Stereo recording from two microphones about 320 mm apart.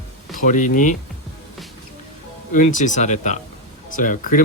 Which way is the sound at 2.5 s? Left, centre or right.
Left.